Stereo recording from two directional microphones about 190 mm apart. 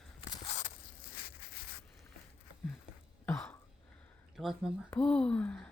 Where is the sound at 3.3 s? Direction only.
5° left (ahead or behind).